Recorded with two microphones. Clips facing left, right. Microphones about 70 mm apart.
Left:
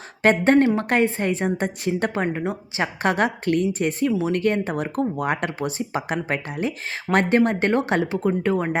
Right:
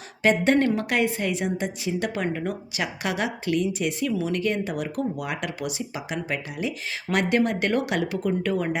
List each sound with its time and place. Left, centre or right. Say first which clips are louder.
0.2 s a woman's voice: left 4 dB; left
2.4 s speech: left 3 dB; left